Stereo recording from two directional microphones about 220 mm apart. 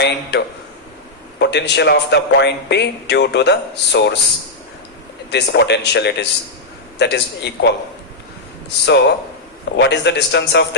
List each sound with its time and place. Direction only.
0.0 s a man's voice: 50° left (ahead or behind)
5.3 s a man's voice: 50° left (ahead or behind)
8.9 s a man's voice: 50° left (ahead or behind)